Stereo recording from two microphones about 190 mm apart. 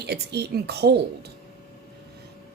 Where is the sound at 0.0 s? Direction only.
60° right (ahead or behind).